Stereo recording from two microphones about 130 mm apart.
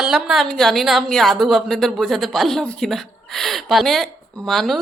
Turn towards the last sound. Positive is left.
turn(degrees=0)  # may be behind; listen again after turning